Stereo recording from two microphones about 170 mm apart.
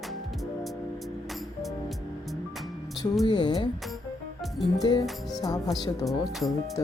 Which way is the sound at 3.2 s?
25° left (ahead or behind).